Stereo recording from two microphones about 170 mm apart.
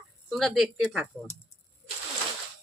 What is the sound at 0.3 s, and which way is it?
Speech, centre (ahead or behind).